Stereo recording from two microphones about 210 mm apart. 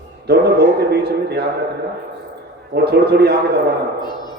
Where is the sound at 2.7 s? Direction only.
50° right (ahead or behind).